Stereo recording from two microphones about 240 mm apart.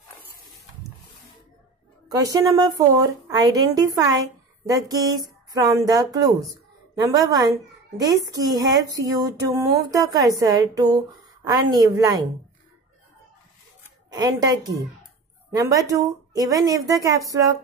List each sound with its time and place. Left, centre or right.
2.0 s a woman's voice: centre
14.1 s a woman's voice: centre